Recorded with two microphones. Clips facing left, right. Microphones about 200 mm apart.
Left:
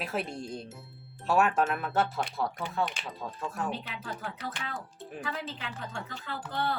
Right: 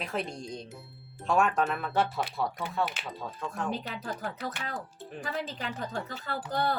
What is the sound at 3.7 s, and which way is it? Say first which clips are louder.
Speech: right 3 dB; 40° right (ahead or behind).